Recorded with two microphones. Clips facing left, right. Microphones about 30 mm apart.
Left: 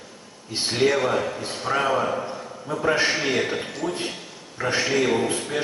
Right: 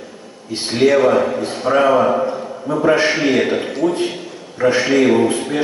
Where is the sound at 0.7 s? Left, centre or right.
Centre.